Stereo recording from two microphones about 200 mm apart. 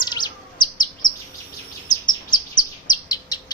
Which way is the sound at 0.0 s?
20° left (ahead or behind).